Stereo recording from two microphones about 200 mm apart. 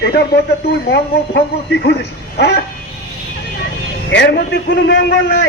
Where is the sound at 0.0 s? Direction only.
55° left (ahead or behind).